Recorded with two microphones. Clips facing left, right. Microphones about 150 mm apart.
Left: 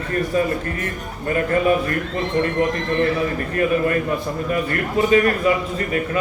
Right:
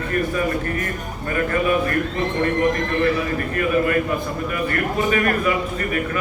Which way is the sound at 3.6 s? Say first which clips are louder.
Left 1 dB; 30° left (ahead or behind).